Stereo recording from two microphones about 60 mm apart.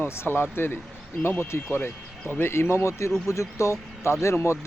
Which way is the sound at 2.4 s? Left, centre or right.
Left.